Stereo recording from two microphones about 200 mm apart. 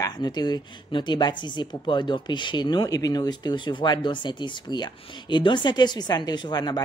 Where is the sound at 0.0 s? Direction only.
20° left (ahead or behind).